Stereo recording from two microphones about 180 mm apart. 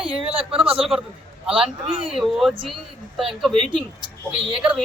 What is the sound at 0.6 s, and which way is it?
Speech, 30° right (ahead or behind).